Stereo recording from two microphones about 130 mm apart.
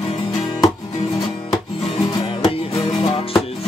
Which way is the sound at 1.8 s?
50° left (ahead or behind).